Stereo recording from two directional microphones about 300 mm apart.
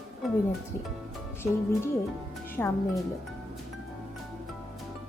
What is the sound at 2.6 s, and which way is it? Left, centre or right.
Speech, centre.